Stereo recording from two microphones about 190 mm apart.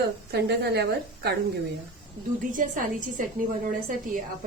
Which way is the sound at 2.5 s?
45° right (ahead or behind).